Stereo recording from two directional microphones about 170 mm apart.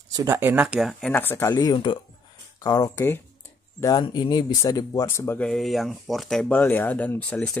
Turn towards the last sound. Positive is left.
turn(degrees=5)  # may be behind; listen again after turning